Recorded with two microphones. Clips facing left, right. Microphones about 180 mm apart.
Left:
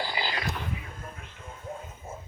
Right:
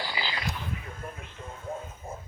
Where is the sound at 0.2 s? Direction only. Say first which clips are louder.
Left 2 dB; 50° left (ahead or behind).